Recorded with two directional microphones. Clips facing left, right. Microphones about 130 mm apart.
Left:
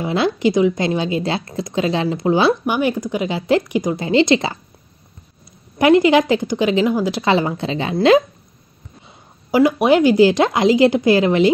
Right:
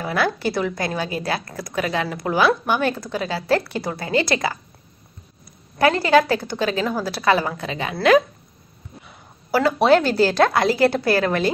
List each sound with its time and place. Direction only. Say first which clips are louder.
0.0 s a woman's voice: left 5 dB; 20° left (ahead or behind)
2.6 s speech: left 3 dB; 15° left (ahead or behind)
5.8 s a woman's voice: left 4 dB; 20° left (ahead or behind)
9.0 s a woman's voice: even; 15° left (ahead or behind)